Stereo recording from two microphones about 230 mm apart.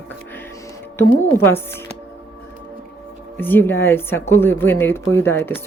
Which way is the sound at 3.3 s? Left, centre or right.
Centre.